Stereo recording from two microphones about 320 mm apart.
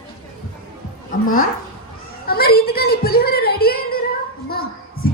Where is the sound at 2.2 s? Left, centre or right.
Left.